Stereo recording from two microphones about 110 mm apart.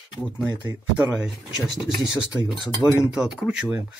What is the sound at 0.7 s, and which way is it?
Speech, 20° right (ahead or behind).